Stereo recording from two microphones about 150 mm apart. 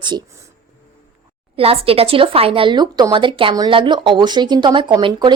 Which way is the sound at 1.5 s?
40° right (ahead or behind).